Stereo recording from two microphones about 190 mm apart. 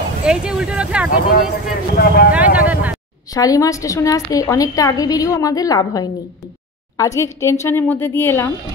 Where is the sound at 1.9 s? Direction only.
55° left (ahead or behind).